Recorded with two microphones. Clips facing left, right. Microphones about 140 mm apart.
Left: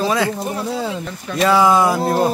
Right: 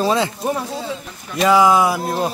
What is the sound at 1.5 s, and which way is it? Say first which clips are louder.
Speech: even; 15° right (ahead or behind).